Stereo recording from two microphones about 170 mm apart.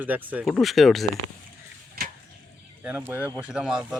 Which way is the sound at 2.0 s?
60° right (ahead or behind).